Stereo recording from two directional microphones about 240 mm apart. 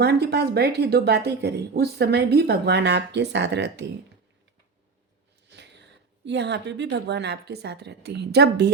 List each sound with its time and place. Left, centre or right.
0.0 s speech: right
5.5 s speech: right